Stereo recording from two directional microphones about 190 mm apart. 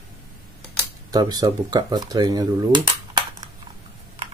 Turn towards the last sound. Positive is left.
turn(degrees=-30)  # may be behind; listen again after turning